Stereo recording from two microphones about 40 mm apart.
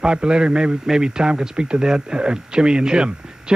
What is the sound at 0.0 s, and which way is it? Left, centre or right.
Speech, right.